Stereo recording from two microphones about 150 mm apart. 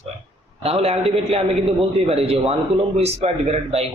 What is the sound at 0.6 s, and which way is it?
A man's voice, 45° right (ahead or behind).